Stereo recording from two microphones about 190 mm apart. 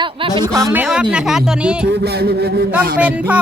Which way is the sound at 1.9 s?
60° right (ahead or behind).